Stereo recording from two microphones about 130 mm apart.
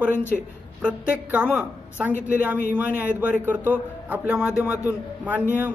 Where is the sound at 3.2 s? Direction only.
15° right (ahead or behind).